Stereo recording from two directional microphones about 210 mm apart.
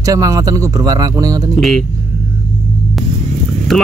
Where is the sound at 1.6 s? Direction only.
Centre (ahead or behind).